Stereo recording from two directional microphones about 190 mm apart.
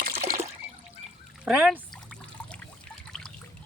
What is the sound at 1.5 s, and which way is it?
Speech, 5° right (ahead or behind).